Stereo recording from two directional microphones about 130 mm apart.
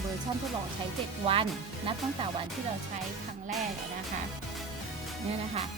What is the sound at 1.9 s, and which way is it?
Speech, 40° right (ahead or behind).